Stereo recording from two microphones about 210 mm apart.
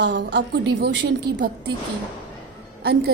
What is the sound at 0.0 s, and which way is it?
Speech, 55° right (ahead or behind).